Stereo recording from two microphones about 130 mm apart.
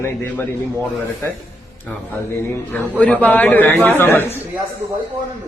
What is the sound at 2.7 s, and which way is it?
A man's voice, 10° left (ahead or behind).